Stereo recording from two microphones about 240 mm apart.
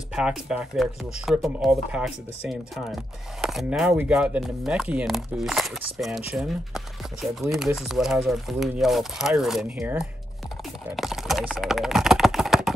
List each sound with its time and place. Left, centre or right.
0.1 s speech: centre